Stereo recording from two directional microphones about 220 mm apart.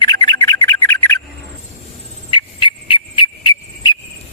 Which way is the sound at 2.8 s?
25° left (ahead or behind).